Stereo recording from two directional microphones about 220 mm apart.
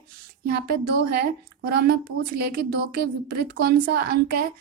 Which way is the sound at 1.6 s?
45° right (ahead or behind).